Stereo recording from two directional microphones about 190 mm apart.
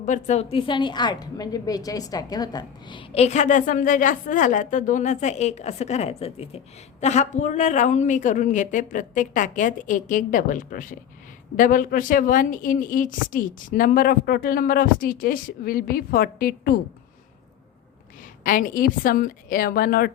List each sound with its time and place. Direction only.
0.0 s a woman's voice: 40° left (ahead or behind)
18.4 s a woman's voice: 45° left (ahead or behind)